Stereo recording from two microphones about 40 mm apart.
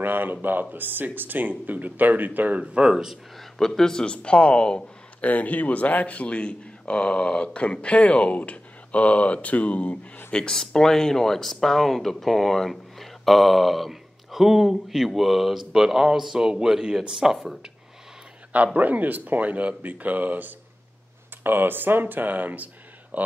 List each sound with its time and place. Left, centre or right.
0.0 s speech: right
2.6 s speech: right
2.9 s speech: centre
3.3 s speech: centre
4.0 s speech: left
5.2 s speech: left
10.3 s speech: left
10.6 s speech: centre
18.5 s speech: right
21.4 s speech: right